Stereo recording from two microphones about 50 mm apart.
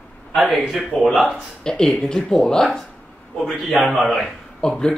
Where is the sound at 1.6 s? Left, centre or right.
Centre.